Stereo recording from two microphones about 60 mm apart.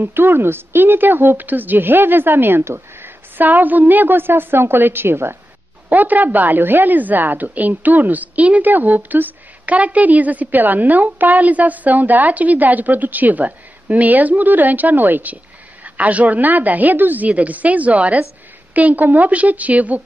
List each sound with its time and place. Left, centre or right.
0.1 s a woman's voice: right
5.9 s a woman's voice: right